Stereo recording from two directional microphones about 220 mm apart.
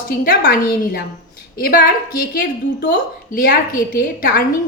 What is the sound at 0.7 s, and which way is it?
A woman's voice, 40° left (ahead or behind).